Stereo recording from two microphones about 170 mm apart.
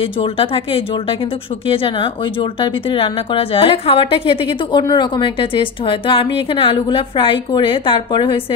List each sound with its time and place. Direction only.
0.2 s a woman's voice: 30° left (ahead or behind)
2.6 s a woman's voice: 30° left (ahead or behind)